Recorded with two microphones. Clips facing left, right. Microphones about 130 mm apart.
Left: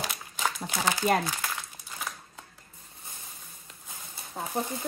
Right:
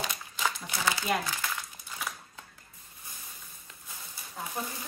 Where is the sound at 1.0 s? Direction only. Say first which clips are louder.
Left 7 dB; 50° left (ahead or behind).